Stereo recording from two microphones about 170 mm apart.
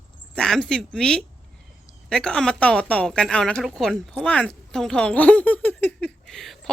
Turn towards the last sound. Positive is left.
turn(degrees=5)  # may be behind; listen again after turning